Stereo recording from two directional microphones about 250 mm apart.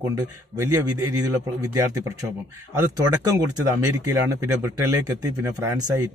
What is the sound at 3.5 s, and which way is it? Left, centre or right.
A man's voice, centre.